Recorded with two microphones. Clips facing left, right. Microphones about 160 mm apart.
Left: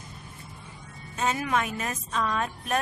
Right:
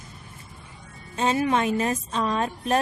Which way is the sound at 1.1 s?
30° right (ahead or behind).